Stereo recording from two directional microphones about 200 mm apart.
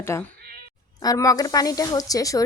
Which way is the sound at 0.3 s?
50° right (ahead or behind).